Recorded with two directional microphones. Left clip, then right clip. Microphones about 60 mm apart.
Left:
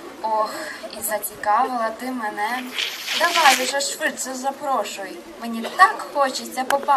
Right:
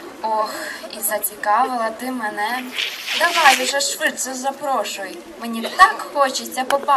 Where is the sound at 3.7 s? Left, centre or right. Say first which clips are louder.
Right 3 dB; centre.